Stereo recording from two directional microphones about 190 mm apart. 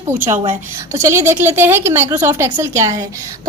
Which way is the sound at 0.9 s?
15° right (ahead or behind).